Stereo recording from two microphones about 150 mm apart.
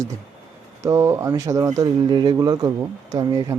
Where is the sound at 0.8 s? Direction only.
20° right (ahead or behind).